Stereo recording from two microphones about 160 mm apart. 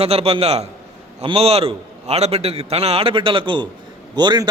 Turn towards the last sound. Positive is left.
turn(degrees=-25)  # may be behind; listen again after turning